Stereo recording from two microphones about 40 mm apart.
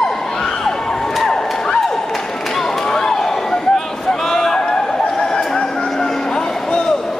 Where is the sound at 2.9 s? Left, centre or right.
Centre.